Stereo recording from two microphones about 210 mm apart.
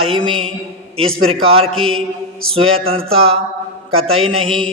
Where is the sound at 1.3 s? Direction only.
25° right (ahead or behind).